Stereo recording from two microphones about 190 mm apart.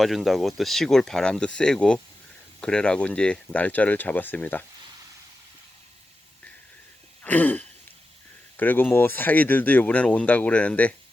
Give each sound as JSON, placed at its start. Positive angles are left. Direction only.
{"t": 0.0, "sound": "speech", "side_deg": 0}
{"t": 7.2, "sound": "throat clearing", "side_deg": 10}
{"t": 8.5, "sound": "speech", "side_deg": 10}